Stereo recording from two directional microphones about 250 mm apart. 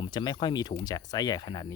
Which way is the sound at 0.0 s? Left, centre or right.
Centre.